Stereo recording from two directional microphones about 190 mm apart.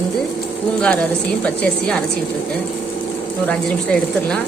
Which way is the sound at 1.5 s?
5° left (ahead or behind).